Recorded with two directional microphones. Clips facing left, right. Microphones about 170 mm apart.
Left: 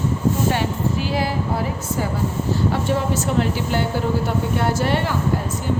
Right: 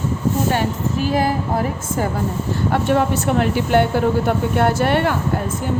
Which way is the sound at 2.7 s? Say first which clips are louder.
Right 4 dB; 60° right (ahead or behind).